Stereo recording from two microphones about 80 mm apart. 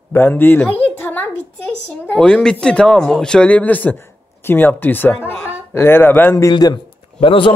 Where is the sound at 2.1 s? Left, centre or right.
Centre; by 6.3 s left.